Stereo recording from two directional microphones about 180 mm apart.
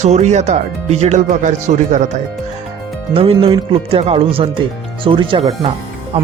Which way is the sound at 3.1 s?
30° right (ahead or behind).